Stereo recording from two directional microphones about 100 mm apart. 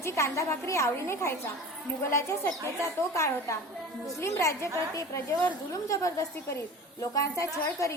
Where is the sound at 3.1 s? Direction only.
30° left (ahead or behind).